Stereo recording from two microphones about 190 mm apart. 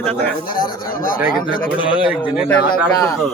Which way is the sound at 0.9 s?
50° left (ahead or behind).